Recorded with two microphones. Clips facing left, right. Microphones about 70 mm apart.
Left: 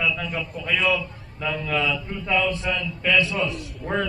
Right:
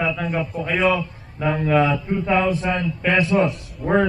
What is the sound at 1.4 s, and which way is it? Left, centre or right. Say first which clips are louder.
A man's voice: right 6 dB; right.